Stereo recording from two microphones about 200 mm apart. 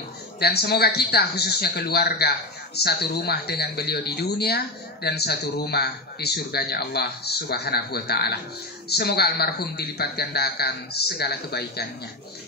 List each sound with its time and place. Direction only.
0.4 s speech: 55° left (ahead or behind)